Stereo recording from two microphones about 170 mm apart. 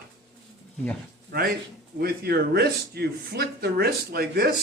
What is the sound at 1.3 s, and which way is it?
Speech, 60° right (ahead or behind).